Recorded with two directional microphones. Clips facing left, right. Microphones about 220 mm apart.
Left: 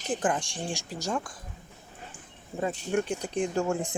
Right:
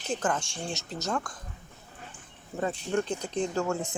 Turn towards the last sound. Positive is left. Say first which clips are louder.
# left 1 dB
turn(degrees=15)  # may be behind; listen again after turning